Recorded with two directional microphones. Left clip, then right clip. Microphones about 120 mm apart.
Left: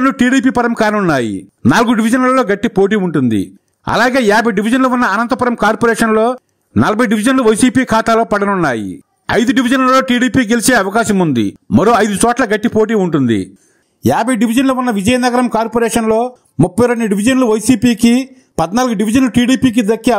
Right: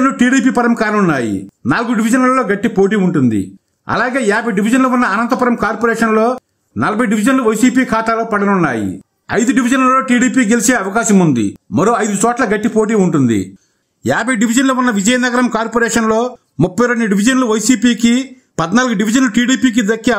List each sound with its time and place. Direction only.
0.0 s a man's voice: 60° left (ahead or behind); by 1.3 s 75° left (ahead or behind)
1.7 s a man's voice: 60° left (ahead or behind); by 8.5 s 90° left
8.5 s speech: 80° left
9.3 s a man's voice: 50° left (ahead or behind)
14.0 s a man's voice: 40° left (ahead or behind)